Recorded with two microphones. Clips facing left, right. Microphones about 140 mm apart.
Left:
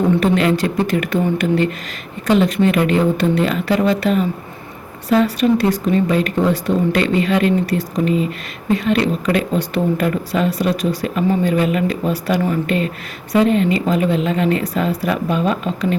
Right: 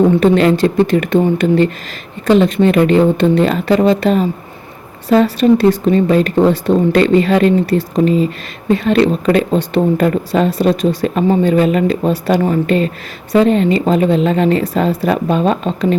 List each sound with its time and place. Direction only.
0.2 s a woman's voice: 35° right (ahead or behind)